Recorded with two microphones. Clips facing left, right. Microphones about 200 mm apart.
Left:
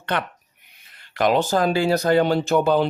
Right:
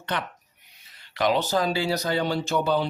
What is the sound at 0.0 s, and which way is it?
Speech, 60° left (ahead or behind).